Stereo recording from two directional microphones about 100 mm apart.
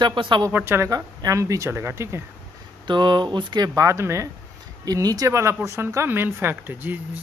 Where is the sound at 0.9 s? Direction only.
40° right (ahead or behind).